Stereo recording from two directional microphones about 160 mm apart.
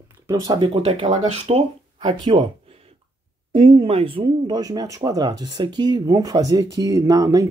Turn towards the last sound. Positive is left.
turn(degrees=-20)  # may be behind; listen again after turning